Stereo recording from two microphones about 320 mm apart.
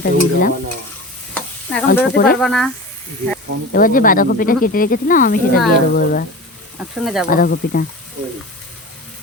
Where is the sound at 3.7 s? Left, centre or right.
Left.